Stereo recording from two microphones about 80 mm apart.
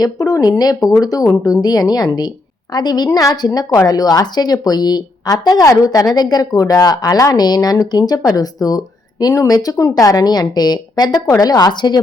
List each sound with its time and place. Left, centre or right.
0.0 s a woman's voice: left